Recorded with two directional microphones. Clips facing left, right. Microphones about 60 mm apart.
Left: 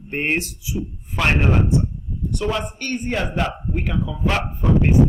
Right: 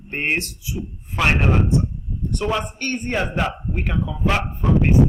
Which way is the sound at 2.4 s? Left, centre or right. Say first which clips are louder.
Right 1 dB; centre.